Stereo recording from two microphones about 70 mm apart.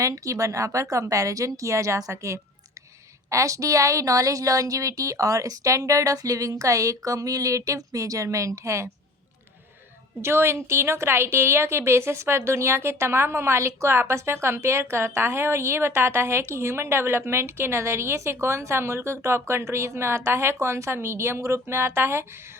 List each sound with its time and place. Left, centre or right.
0.0 s speech: right
10.2 s a woman's voice: right